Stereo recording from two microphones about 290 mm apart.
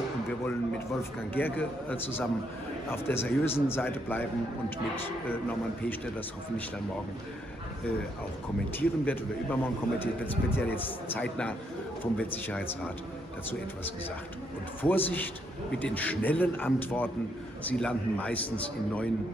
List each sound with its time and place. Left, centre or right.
1.3 s a man's voice: centre
8.7 s a man's voice: centre
14.8 s a man's voice: centre